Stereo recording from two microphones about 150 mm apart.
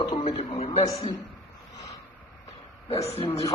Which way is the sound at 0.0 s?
30° left (ahead or behind).